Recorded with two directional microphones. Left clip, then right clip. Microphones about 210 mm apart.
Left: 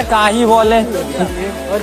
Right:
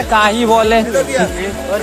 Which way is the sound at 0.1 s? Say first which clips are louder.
Even; 5° left (ahead or behind).